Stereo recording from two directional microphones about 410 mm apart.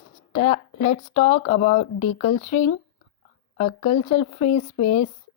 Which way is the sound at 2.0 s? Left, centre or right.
Left.